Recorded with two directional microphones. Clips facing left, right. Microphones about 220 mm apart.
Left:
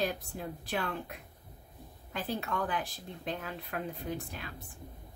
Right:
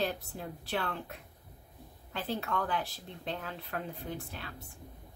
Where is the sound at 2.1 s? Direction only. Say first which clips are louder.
Even; 15° left (ahead or behind).